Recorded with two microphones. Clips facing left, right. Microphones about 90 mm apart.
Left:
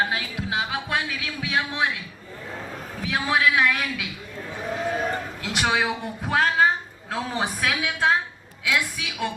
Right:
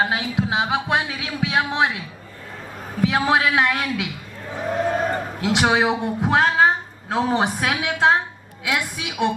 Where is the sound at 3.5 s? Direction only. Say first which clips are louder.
Right 2 dB; 25° right (ahead or behind).